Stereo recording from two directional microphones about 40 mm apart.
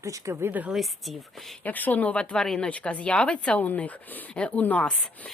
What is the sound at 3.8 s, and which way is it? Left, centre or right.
A woman's voice, left.